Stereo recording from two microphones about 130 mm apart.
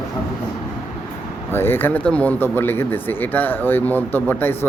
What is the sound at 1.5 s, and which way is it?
Speech, 15° left (ahead or behind).